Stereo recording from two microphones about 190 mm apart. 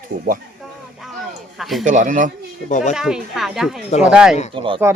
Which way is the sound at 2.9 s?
5° right (ahead or behind).